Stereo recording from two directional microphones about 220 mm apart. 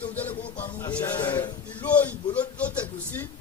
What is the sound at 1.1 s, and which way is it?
Speech, 20° left (ahead or behind).